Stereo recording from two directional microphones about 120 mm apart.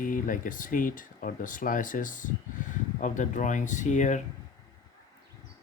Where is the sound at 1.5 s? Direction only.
90° left.